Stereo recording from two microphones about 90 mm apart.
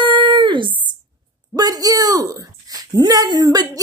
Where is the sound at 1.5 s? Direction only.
45° right (ahead or behind).